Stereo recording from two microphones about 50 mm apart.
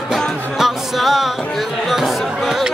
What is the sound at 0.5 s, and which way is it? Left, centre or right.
Music, centre.